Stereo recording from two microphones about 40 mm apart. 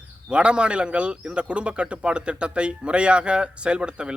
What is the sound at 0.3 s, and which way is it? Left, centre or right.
A man's voice, right.